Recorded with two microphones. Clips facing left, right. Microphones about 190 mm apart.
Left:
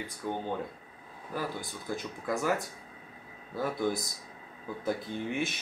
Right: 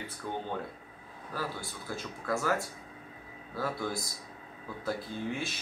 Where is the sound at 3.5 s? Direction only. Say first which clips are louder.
Left 3 dB; 20° left (ahead or behind).